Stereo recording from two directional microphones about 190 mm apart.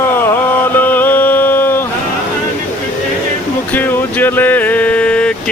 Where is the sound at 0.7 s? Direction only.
10° left (ahead or behind).